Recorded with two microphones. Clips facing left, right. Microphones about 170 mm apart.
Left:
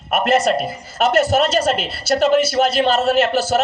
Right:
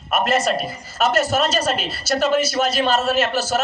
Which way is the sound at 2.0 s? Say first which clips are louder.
Left 4 dB; 60° left (ahead or behind).